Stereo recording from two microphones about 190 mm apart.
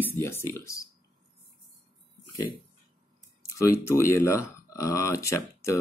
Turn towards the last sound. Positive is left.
turn(degrees=15)  # may be behind; listen again after turning